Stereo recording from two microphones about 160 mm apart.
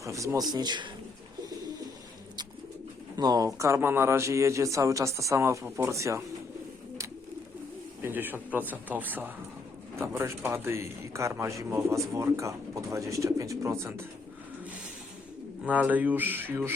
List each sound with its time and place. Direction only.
0.0 s speech: 20° right (ahead or behind)
3.2 s speech: 25° right (ahead or behind)
8.0 s a man's voice: 10° right (ahead or behind)
15.6 s a man's voice: 10° right (ahead or behind)